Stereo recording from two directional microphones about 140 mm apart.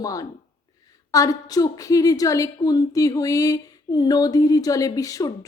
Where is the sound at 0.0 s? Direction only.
25° left (ahead or behind).